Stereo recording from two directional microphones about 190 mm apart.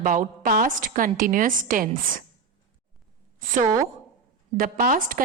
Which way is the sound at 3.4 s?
45° right (ahead or behind).